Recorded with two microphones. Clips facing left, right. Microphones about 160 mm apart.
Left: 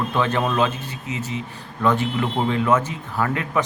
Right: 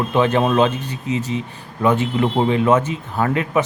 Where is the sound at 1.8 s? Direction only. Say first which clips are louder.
Right 3 dB; 15° right (ahead or behind).